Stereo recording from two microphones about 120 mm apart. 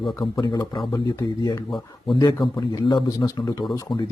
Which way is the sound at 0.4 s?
35° left (ahead or behind).